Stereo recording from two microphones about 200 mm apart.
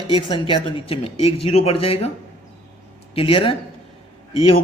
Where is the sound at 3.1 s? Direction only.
25° left (ahead or behind).